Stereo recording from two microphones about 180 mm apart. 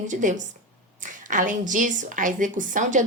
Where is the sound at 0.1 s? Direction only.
45° right (ahead or behind).